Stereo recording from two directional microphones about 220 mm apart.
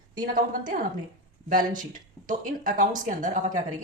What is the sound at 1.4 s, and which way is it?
Speech, 35° right (ahead or behind).